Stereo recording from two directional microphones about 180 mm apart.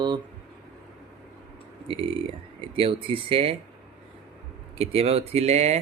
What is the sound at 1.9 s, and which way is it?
Speech, 30° right (ahead or behind).